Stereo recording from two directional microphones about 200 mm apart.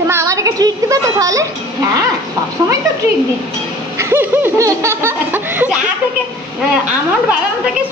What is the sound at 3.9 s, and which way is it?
Laughter, 10° right (ahead or behind).